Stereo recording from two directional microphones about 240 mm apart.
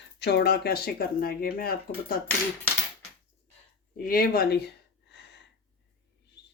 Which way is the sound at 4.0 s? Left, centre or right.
Left.